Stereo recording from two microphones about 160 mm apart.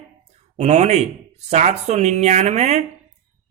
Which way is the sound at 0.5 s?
45° right (ahead or behind).